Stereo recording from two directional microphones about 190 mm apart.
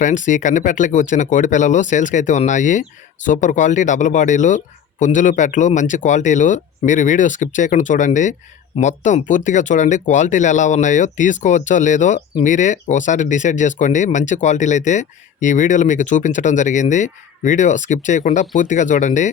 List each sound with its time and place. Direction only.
0.0 s speech: 40° left (ahead or behind)